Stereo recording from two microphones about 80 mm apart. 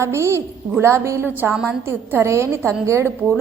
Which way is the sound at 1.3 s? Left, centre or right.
Right.